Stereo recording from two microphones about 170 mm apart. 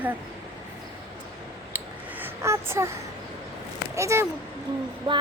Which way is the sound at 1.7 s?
10° right (ahead or behind).